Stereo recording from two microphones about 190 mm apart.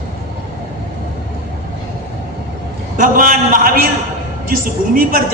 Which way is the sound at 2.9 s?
45° right (ahead or behind).